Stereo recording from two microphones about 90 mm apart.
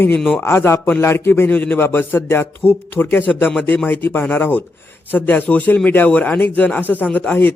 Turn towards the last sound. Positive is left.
turn(degrees=20)  # may be behind; listen again after turning